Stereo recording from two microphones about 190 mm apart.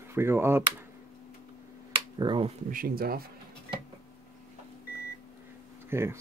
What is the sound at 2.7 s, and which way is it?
Speech, 50° right (ahead or behind).